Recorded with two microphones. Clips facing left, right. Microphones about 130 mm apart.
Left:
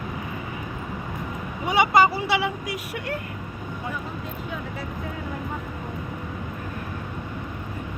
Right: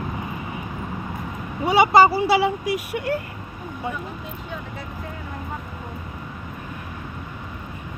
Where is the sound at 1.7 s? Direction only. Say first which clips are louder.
Right 4 dB; 30° right (ahead or behind).